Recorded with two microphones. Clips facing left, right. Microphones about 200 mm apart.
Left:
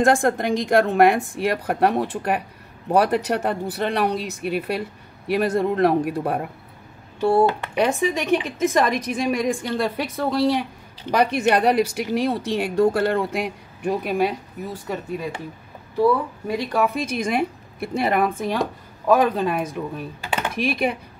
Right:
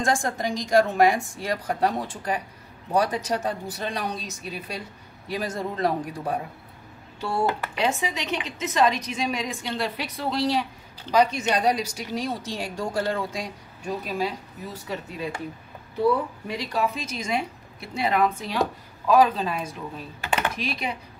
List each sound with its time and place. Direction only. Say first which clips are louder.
0.0 s a woman's voice: left 7 dB; 60° left (ahead or behind)
16.4 s speech: left 7 dB; 55° left (ahead or behind)
20.5 s speech: left 8 dB; 55° left (ahead or behind)